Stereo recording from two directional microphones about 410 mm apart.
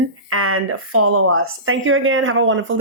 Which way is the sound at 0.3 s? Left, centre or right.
Right.